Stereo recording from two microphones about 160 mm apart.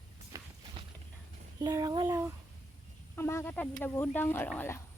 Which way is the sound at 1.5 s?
25° right (ahead or behind).